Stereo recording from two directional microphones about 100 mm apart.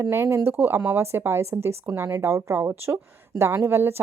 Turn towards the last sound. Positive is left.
turn(degrees=-25)  # may be behind; listen again after turning